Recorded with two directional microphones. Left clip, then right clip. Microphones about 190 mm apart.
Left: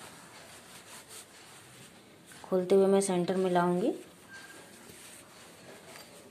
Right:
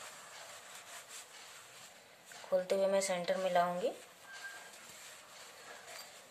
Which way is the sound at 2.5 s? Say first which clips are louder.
Left 6 dB; 20° left (ahead or behind).